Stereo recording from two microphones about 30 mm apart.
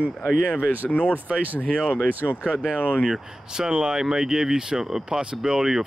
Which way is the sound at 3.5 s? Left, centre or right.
Right.